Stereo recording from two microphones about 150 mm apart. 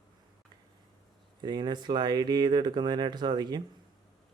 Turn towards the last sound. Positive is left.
turn(degrees=-30)  # may be behind; listen again after turning